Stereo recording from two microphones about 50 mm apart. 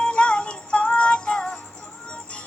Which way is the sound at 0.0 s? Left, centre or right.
Left.